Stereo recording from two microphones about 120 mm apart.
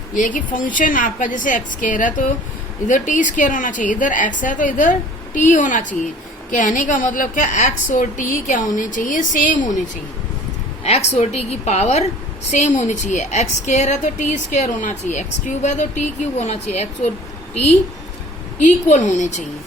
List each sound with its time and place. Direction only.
0.1 s a woman's voice: 90° left
10.8 s a woman's voice: 65° left (ahead or behind)
18.9 s a woman's voice: 85° left